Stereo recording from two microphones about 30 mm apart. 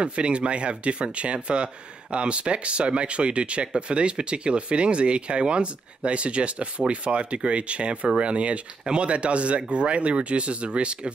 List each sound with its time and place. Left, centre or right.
0.0 s speech: right